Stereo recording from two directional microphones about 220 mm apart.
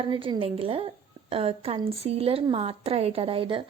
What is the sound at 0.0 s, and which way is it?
A woman's voice, 25° right (ahead or behind).